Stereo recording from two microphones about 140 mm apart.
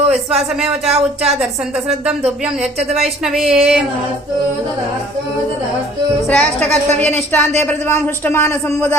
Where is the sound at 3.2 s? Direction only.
Centre (ahead or behind).